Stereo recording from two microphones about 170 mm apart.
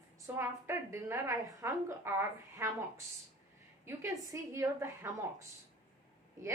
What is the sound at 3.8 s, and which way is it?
A woman's voice, 15° right (ahead or behind).